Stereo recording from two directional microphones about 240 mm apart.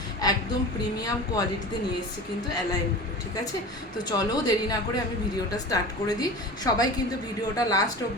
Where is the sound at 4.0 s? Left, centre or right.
Centre.